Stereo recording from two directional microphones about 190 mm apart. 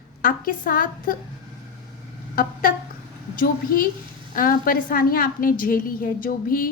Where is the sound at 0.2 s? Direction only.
45° left (ahead or behind).